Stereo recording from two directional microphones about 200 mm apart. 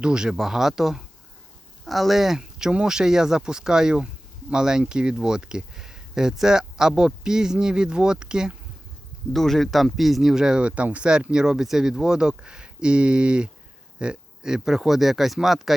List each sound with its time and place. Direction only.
0.0 s speech: 5° right (ahead or behind)